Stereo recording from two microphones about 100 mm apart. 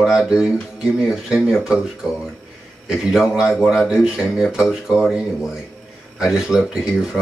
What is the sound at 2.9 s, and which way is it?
A man's voice, 5° right (ahead or behind).